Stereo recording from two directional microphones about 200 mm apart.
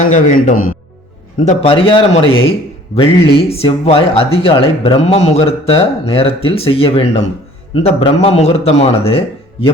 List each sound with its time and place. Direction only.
0.0 s speech: 40° left (ahead or behind)
1.4 s a man's voice: 30° left (ahead or behind)